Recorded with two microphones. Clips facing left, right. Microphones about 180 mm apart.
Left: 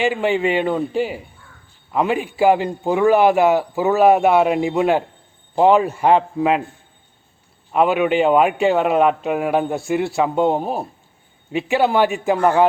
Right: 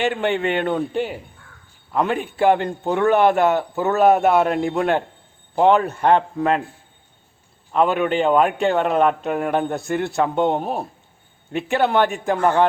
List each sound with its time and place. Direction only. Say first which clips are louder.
0.0 s a man's voice: left 2 dB; centre (ahead or behind)
7.7 s a man's voice: left 2 dB; 10° left (ahead or behind)